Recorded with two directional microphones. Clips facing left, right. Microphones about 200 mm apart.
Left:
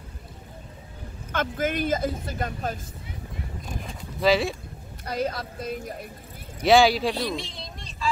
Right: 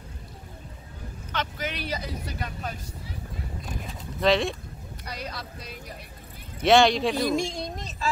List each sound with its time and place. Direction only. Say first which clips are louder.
1.3 s speech: left 6 dB; 50° left (ahead or behind)
3.8 s bird: left 1 dB; 5° left (ahead or behind)
5.0 s speech: left 9 dB; 50° left (ahead or behind)
6.6 s speech: left 1 dB; centre (ahead or behind)
7.2 s speech: right 6 dB; 45° right (ahead or behind)